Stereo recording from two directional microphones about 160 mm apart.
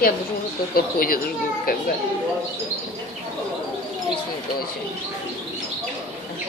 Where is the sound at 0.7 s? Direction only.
65° left (ahead or behind).